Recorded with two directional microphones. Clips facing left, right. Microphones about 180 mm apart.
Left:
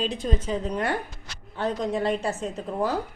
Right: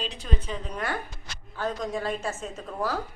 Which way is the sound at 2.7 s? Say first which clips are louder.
Left 3 dB; 20° left (ahead or behind).